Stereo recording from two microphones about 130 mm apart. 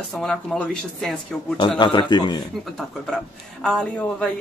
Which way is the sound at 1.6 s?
40° left (ahead or behind).